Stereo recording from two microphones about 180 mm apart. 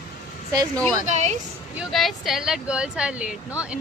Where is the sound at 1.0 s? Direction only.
40° right (ahead or behind).